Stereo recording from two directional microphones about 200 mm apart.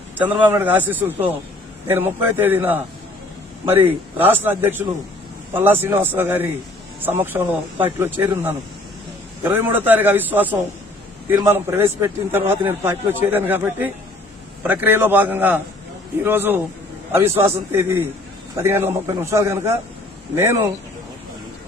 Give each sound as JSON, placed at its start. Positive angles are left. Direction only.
{"t": 0.3, "sound": "a man's voice", "side_deg": -10}
{"t": 3.7, "sound": "speech", "side_deg": -30}
{"t": 4.2, "sound": "a man's voice", "side_deg": -10}
{"t": 9.4, "sound": "a man's voice", "side_deg": -10}